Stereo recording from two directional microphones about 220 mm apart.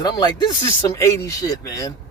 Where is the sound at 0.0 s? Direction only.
20° left (ahead or behind).